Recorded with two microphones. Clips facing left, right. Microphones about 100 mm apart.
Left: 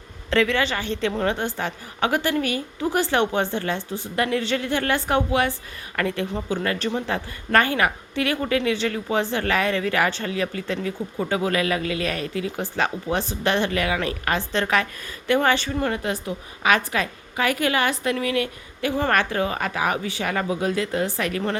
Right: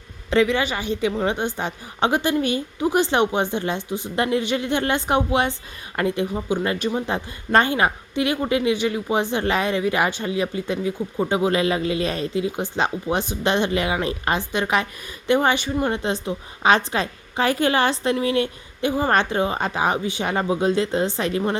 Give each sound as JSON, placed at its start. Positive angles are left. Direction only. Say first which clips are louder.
{"t": 0.3, "sound": "a woman's voice", "louder": "right 2 dB", "side_deg": -15}